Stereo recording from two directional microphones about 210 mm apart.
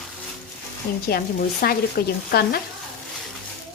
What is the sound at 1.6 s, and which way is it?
Speech, 45° left (ahead or behind).